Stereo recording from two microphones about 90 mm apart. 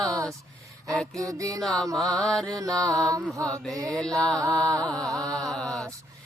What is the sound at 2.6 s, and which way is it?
Music, 40° right (ahead or behind).